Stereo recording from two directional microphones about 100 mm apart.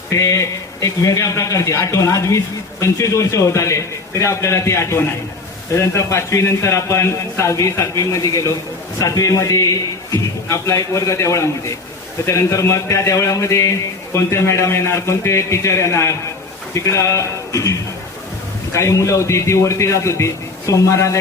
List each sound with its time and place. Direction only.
0.1 s a man's voice: 35° left (ahead or behind)